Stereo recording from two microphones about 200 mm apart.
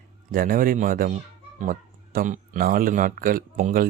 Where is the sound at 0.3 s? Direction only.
45° right (ahead or behind).